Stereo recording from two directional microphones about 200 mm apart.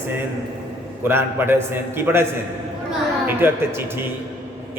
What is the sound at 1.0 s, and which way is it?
A man's voice, 10° right (ahead or behind).